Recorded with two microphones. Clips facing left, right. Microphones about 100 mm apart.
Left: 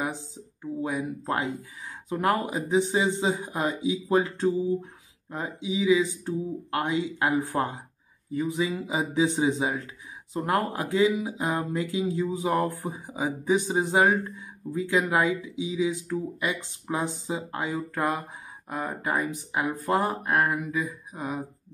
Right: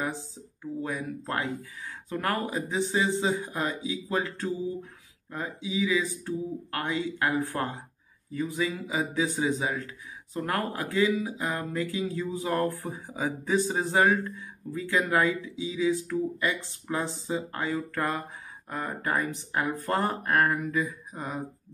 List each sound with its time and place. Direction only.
0.0 s speech: 15° left (ahead or behind)